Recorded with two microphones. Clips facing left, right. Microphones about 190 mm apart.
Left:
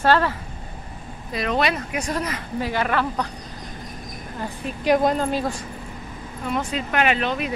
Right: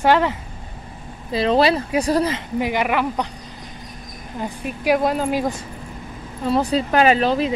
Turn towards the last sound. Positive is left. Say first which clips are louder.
# right 6 dB
turn(degrees=-35)  # may be behind; listen again after turning